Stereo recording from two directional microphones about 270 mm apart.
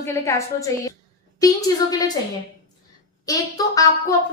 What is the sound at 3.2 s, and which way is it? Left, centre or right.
Speech, centre.